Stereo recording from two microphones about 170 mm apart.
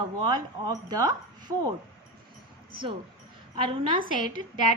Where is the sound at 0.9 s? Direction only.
25° right (ahead or behind).